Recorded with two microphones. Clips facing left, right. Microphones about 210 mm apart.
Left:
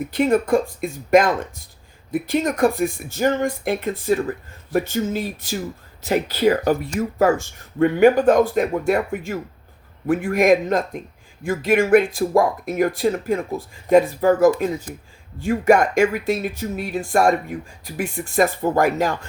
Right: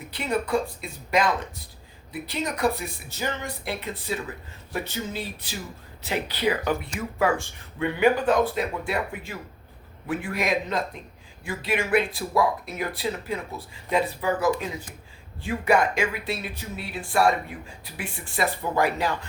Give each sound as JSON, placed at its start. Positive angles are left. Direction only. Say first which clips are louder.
{"t": 0.1, "sound": "speech", "louder": "left 8 dB", "side_deg": 50}